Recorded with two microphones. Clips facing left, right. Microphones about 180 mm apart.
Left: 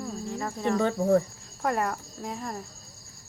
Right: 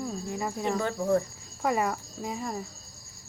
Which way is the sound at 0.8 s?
20° left (ahead or behind).